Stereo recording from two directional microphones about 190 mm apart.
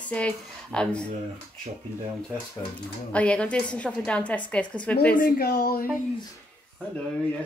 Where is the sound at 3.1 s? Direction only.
5° left (ahead or behind).